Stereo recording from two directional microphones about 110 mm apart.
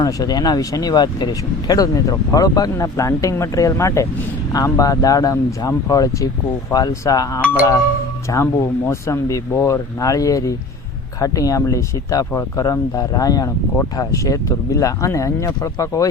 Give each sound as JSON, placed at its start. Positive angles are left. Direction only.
{"t": 0.0, "sound": "speech", "side_deg": 35}